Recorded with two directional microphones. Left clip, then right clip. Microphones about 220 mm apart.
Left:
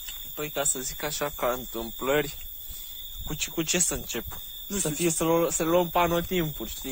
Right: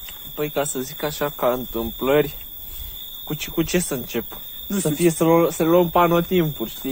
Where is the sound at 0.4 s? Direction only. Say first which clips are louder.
Right 6 dB; 30° left (ahead or behind).